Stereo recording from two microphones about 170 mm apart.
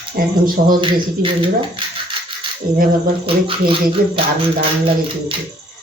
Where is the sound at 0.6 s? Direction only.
45° right (ahead or behind).